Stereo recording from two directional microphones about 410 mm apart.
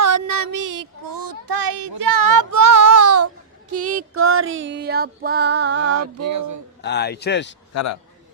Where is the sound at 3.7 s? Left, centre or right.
Right.